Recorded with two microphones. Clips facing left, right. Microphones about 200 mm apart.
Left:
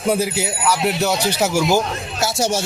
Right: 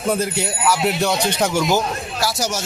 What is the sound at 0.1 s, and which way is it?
Speech, 5° left (ahead or behind).